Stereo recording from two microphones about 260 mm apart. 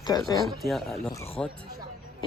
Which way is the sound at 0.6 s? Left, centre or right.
Centre.